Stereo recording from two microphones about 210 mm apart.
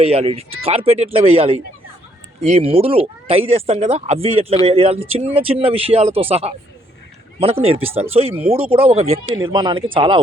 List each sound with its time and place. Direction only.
0.0 s speech: 30° right (ahead or behind)